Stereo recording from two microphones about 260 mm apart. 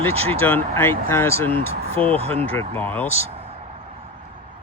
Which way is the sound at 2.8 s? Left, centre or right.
Centre.